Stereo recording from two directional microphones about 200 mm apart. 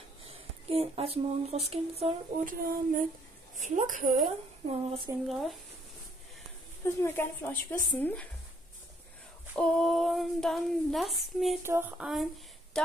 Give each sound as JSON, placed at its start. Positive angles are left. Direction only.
{"t": 0.2, "sound": "speech", "side_deg": -30}
{"t": 2.5, "sound": "speech", "side_deg": -45}
{"t": 4.6, "sound": "speech", "side_deg": -30}
{"t": 5.3, "sound": "female singing", "side_deg": 0}
{"t": 6.8, "sound": "speech", "side_deg": 10}
{"t": 9.6, "sound": "female singing", "side_deg": 5}
{"t": 11.6, "sound": "a sound", "side_deg": -10}
{"t": 12.7, "sound": "speech", "side_deg": 5}